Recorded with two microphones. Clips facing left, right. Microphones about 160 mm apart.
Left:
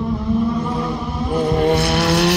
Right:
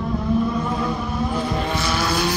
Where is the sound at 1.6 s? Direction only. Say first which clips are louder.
Left 7 dB; 65° left (ahead or behind).